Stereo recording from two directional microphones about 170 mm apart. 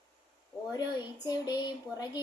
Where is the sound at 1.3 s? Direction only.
25° left (ahead or behind).